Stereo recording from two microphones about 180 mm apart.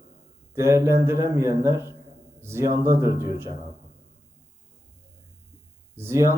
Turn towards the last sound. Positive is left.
turn(degrees=-15)  # may be behind; listen again after turning